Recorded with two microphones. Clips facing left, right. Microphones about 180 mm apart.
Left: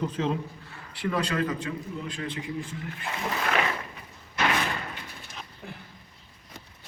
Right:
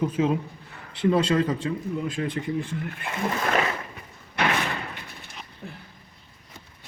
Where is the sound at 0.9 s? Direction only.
25° right (ahead or behind).